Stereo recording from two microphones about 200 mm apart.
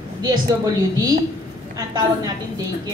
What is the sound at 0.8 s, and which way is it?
Speech, 20° right (ahead or behind).